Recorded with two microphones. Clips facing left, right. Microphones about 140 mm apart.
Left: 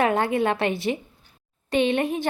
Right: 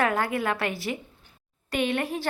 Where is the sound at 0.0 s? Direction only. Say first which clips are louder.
Left 4 dB; 25° left (ahead or behind).